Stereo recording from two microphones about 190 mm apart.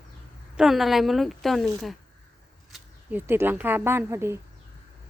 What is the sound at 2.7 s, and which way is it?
Speech, 10° right (ahead or behind).